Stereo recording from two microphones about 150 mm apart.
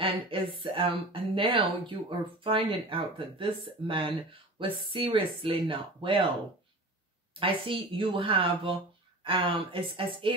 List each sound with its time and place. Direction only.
0.0 s a woman's voice: 35° right (ahead or behind)
7.3 s a woman's voice: 35° right (ahead or behind)